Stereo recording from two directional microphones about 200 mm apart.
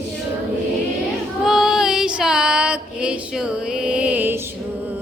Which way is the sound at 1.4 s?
Centre (ahead or behind).